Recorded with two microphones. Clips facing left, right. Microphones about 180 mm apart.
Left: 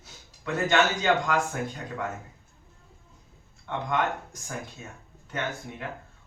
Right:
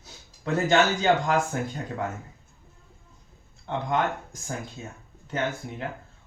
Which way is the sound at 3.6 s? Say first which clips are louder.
Right 2 dB; 30° right (ahead or behind).